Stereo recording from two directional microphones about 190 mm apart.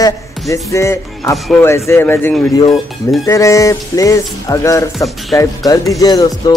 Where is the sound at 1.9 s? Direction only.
10° left (ahead or behind).